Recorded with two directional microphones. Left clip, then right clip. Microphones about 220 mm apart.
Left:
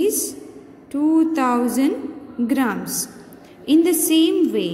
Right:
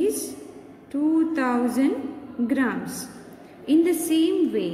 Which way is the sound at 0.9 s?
20° left (ahead or behind).